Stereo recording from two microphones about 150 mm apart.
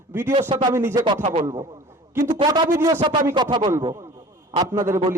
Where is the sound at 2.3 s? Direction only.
30° right (ahead or behind).